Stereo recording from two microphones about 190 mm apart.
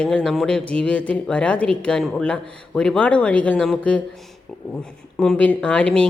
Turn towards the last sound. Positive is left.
turn(degrees=5)  # may be behind; listen again after turning